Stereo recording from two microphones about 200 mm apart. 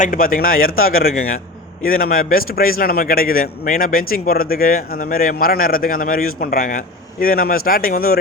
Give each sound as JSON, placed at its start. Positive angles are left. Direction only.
{"t": 0.0, "sound": "a man's voice", "side_deg": 45}